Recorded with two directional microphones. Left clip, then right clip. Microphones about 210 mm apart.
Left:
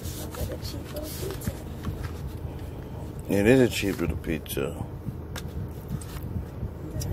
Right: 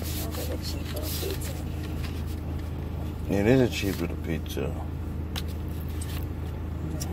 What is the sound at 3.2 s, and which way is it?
Speech, 20° left (ahead or behind).